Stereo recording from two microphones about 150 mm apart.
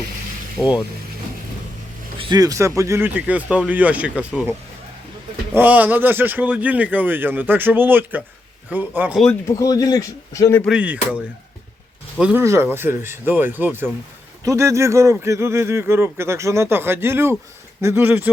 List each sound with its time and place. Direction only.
0.6 s speech: centre (ahead or behind)
2.1 s a man's voice: 25° right (ahead or behind); by 4.5 s 10° right (ahead or behind)
5.5 s a man's voice: 10° right (ahead or behind)
9.6 s speech: 25° left (ahead or behind)
10.7 s a man's voice: 10° right (ahead or behind)
12.2 s a man's voice: 15° right (ahead or behind)